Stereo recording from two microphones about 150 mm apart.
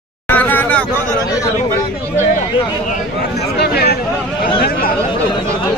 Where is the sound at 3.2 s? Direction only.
90° left.